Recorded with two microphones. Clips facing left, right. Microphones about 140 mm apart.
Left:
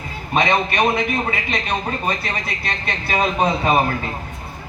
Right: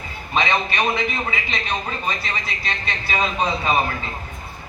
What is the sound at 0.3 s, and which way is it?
A man's voice, 50° left (ahead or behind).